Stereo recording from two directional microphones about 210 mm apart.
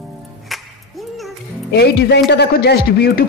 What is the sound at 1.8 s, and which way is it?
Speech, 50° left (ahead or behind).